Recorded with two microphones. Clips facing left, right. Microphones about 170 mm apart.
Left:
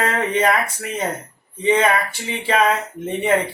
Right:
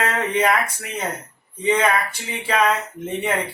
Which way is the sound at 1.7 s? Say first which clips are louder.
Left 2 dB; 30° left (ahead or behind).